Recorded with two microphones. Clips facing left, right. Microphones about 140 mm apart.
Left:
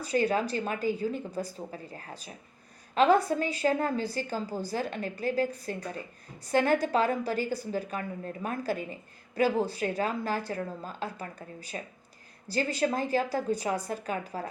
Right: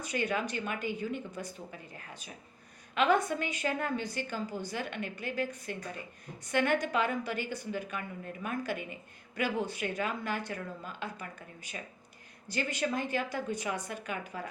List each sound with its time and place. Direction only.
0.0 s a woman's voice: 35° left (ahead or behind)